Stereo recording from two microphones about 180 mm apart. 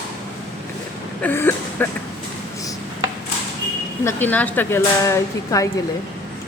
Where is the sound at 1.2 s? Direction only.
10° left (ahead or behind).